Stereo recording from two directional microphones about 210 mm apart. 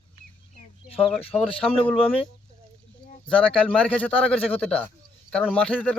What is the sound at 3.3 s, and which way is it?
A man's voice, 5° left (ahead or behind).